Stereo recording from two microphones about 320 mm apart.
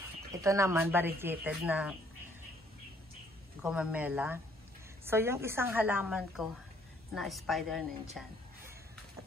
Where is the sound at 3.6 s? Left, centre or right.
Centre.